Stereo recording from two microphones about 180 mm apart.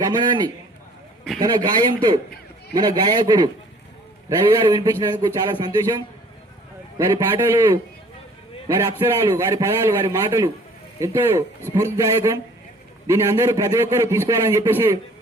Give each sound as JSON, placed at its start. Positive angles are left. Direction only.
{"t": 0.0, "sound": "a man's voice", "side_deg": -20}
{"t": 7.0, "sound": "a man's voice", "side_deg": -15}